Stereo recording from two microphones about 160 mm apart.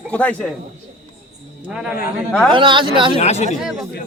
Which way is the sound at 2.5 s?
30° right (ahead or behind).